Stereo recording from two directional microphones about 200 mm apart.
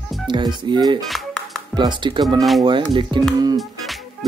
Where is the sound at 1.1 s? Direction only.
5° left (ahead or behind).